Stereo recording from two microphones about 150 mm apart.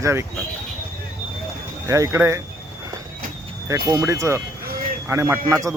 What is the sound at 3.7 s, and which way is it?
Speech, 20° right (ahead or behind).